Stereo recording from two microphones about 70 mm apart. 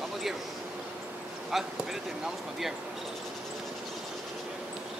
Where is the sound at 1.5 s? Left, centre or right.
Centre.